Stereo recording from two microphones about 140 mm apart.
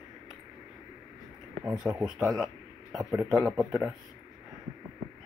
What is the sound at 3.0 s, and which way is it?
Speech, 20° right (ahead or behind).